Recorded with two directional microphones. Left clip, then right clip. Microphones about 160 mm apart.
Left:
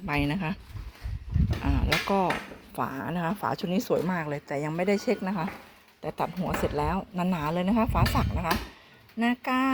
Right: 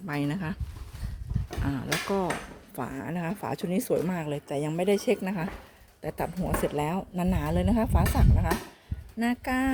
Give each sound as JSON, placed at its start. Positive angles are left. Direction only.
{"t": 0.0, "sound": "speech", "side_deg": -5}
{"t": 3.4, "sound": "a woman's voice", "side_deg": -15}